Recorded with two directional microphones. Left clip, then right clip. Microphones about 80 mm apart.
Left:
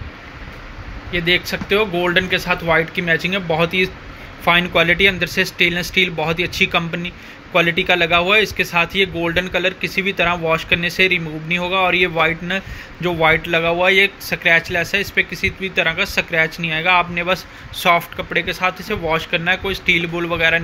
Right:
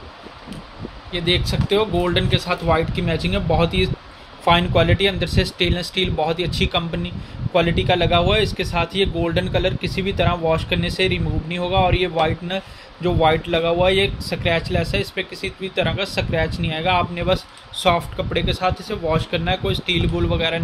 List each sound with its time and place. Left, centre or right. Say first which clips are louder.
1.1 s speech: left 4 dB; centre